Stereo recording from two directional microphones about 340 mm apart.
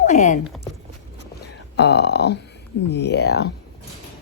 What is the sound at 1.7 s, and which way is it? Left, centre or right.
Speech, left.